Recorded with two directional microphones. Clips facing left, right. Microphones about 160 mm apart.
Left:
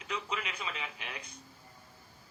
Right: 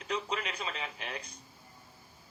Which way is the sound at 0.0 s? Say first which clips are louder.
Right 3 dB; 35° right (ahead or behind).